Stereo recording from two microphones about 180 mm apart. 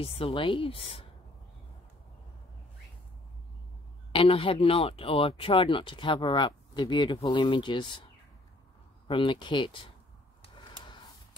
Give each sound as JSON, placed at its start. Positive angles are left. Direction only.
{"t": 0.0, "sound": "speech", "side_deg": 30}
{"t": 4.1, "sound": "speech", "side_deg": 30}
{"t": 10.4, "sound": "a sound", "side_deg": 25}